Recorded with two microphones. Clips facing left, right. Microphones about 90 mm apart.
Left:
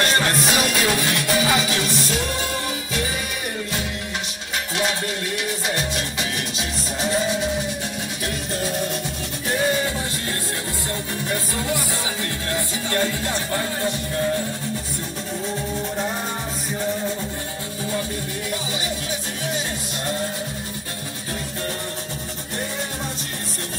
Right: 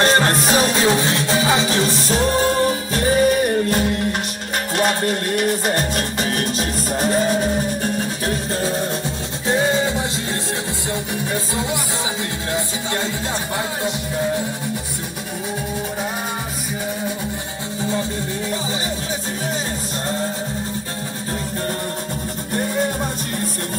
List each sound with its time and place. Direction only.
0.0 s music: 35° right (ahead or behind)
9.5 s music: 25° right (ahead or behind)
12.5 s music: 20° right (ahead or behind)
22.5 s music: 50° right (ahead or behind)